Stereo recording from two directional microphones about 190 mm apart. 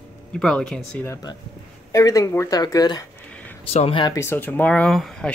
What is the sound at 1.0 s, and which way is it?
Speech, 15° left (ahead or behind).